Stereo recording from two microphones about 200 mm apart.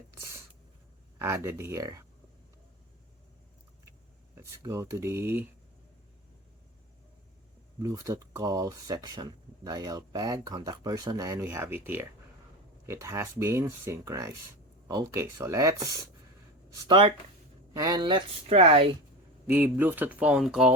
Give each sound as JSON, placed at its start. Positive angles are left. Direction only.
{"t": 0.1, "sound": "a sound", "side_deg": -15}
{"t": 1.2, "sound": "speech", "side_deg": -10}
{"t": 4.4, "sound": "speech", "side_deg": -15}
{"t": 7.8, "sound": "speech", "side_deg": -15}
{"t": 19.5, "sound": "speech", "side_deg": -10}